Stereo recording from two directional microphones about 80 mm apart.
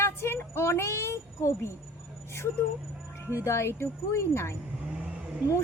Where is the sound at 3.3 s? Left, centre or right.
Left.